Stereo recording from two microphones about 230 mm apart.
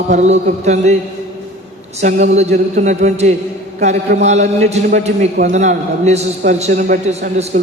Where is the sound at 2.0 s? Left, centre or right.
Right.